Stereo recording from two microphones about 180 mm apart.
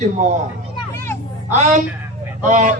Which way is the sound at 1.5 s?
45° right (ahead or behind).